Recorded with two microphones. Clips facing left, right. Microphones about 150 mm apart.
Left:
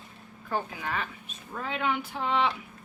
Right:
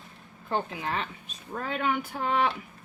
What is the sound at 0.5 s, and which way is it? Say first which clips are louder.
Speech: right 2 dB; 25° right (ahead or behind).